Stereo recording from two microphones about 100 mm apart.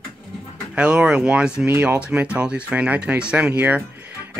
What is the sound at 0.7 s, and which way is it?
Speech, 10° right (ahead or behind).